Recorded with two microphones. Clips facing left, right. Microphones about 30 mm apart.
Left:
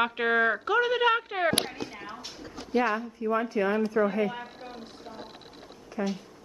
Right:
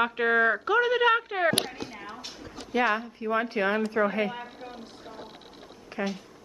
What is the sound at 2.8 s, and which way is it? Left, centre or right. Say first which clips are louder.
Speech: right 1 dB; right.